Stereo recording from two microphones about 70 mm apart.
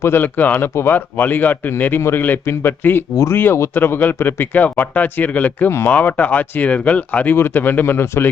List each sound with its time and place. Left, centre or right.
0.0 s speech: left
2.0 s speech: left
2.2 s speech: left